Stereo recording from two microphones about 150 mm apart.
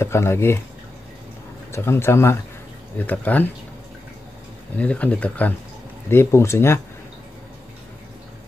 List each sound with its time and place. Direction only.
0.0 s speech: 15° left (ahead or behind)
1.7 s speech: 15° left (ahead or behind)
4.7 s speech: 10° left (ahead or behind)